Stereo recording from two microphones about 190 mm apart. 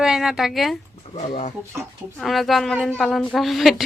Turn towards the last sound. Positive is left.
turn(degrees=0)  # may be behind; listen again after turning